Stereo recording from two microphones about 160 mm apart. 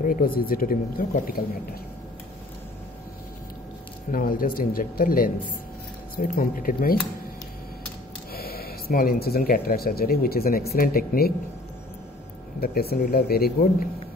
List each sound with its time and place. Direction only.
0.0 s speech: 60° left (ahead or behind)
4.1 s speech: 60° left (ahead or behind)
8.3 s speech: 70° left (ahead or behind)
12.5 s speech: 70° left (ahead or behind)